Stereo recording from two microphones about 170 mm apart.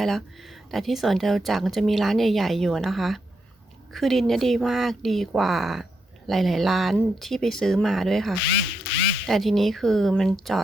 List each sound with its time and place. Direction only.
0.0 s speech: centre (ahead or behind)
8.9 s a sound: 85° left
9.2 s speech: centre (ahead or behind)